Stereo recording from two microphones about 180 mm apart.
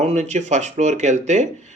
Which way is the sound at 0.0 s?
40° right (ahead or behind).